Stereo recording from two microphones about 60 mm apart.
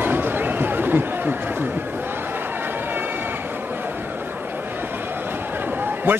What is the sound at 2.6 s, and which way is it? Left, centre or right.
Run, right.